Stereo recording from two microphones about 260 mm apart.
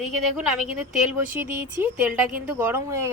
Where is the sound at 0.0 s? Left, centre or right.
Centre.